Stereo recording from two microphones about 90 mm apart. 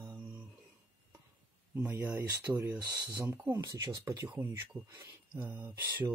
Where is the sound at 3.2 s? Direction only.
30° right (ahead or behind); by 4.4 s 45° right (ahead or behind).